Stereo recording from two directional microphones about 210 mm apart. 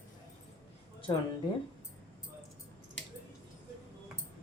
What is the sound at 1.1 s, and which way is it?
Speech, 20° left (ahead or behind).